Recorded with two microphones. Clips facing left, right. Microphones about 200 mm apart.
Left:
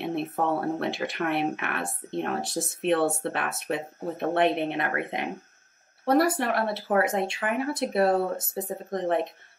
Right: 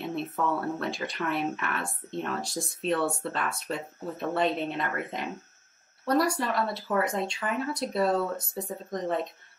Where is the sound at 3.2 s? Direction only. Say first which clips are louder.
Left 2 dB; 60° left (ahead or behind).